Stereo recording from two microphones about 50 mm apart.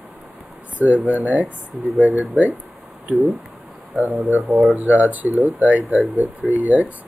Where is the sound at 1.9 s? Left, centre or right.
Centre.